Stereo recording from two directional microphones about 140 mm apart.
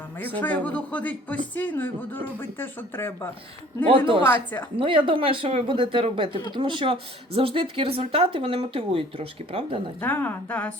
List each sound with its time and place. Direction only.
0.3 s speech: 10° left (ahead or behind)
4.8 s speech: 35° right (ahead or behind)
10.0 s speech: 15° left (ahead or behind)